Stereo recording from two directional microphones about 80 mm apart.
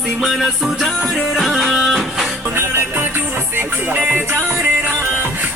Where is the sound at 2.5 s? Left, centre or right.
Right.